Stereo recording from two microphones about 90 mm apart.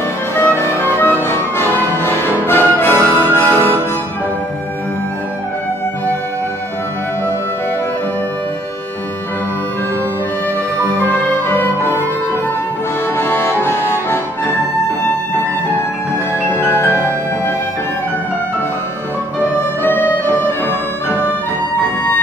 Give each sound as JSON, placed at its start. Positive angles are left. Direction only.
{"t": 0.4, "sound": "music", "side_deg": 25}
{"t": 11.0, "sound": "music", "side_deg": 20}
{"t": 13.2, "sound": "accordion", "side_deg": 25}
{"t": 16.4, "sound": "music", "side_deg": 25}
{"t": 19.8, "sound": "music", "side_deg": 20}